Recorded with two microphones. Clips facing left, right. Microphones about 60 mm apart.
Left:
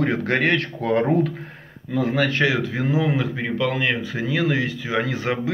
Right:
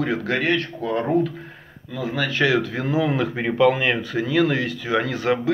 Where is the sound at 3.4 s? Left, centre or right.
Centre.